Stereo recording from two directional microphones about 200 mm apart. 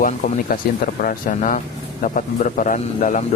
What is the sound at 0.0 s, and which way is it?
Speech, 40° left (ahead or behind).